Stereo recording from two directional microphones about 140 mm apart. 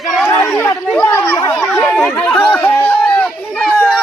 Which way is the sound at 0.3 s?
20° left (ahead or behind).